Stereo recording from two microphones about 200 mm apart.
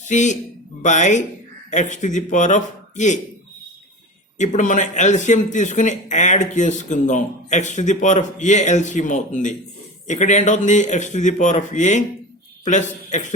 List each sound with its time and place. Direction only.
0.0 s a man's voice: 35° left (ahead or behind)
4.4 s speech: 40° left (ahead or behind)